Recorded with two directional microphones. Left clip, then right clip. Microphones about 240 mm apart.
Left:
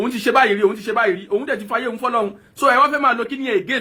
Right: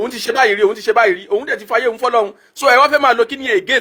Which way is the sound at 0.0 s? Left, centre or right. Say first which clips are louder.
Right 1 dB; right.